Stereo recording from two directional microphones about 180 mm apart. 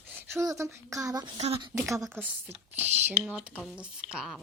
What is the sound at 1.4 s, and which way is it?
Speech, 30° right (ahead or behind).